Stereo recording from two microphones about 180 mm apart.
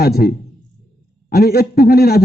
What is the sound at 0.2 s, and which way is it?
A man's voice, 55° left (ahead or behind).